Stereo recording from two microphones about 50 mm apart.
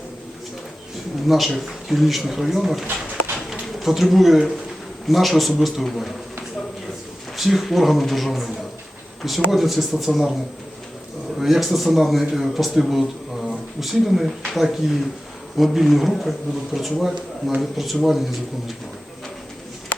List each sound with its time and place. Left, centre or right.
1.3 s speech: centre
7.3 s speech: centre
9.5 s speech: centre
11.3 s speech: centre
19.9 s a sound: left